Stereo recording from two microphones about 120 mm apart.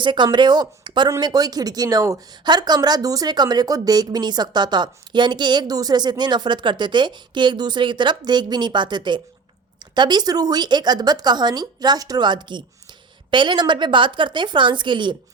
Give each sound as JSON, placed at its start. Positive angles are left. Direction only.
{"t": 0.0, "sound": "speech", "side_deg": -40}